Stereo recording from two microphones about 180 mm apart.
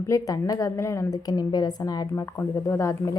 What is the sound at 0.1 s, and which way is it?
A woman's voice, 20° left (ahead or behind).